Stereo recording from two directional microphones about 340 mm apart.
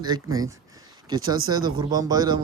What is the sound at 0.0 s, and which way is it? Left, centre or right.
Speech, centre.